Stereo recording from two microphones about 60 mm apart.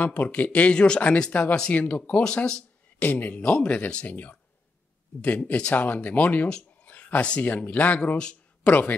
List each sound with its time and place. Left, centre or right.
0.0 s speech: left
3.0 s speech: left